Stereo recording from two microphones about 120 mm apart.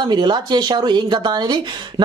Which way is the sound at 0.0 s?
40° right (ahead or behind).